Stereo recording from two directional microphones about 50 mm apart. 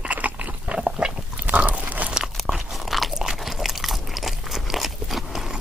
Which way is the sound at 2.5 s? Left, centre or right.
Centre.